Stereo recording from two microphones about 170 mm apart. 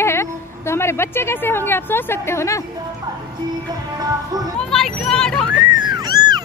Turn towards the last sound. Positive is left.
turn(degrees=-25)  # may be behind; listen again after turning